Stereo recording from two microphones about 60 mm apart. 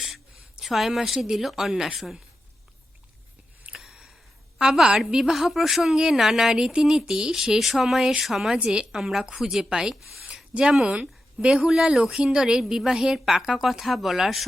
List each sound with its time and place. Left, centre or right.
0.0 s a woman's voice: centre
3.7 s a sound: centre
4.5 s a woman's voice: centre
8.5 s a woman's voice: centre
9.9 s speech: centre
10.2 s a sound: centre
10.8 s a woman's voice: centre